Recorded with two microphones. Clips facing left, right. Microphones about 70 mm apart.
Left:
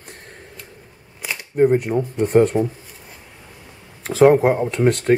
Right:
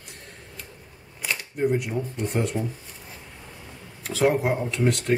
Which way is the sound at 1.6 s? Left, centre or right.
Left.